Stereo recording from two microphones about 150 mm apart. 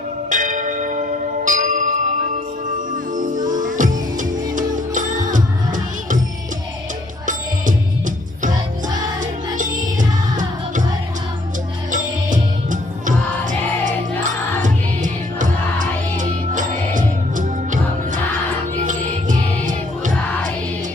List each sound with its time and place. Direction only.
0.3 s bell: 60° right (ahead or behind)
2.6 s music: 60° right (ahead or behind)
7.3 s music: 60° right (ahead or behind)
9.6 s music: 60° right (ahead or behind)
11.9 s music: 60° right (ahead or behind)